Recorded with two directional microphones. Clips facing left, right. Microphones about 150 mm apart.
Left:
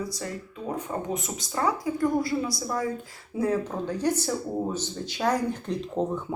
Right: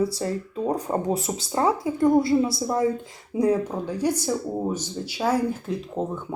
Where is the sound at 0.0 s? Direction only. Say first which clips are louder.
Right 8 dB; 30° right (ahead or behind).